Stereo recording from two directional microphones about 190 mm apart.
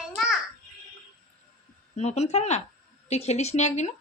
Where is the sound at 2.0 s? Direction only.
35° left (ahead or behind).